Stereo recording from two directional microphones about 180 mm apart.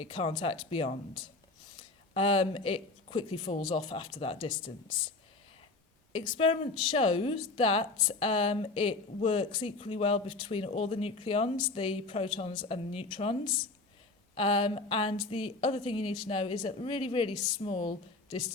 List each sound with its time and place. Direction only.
0.0 s a woman's voice: 30° left (ahead or behind)
6.1 s a woman's voice: 30° left (ahead or behind)
14.3 s a woman's voice: 30° left (ahead or behind)